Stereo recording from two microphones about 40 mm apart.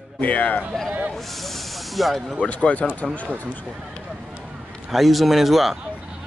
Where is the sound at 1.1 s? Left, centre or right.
Centre.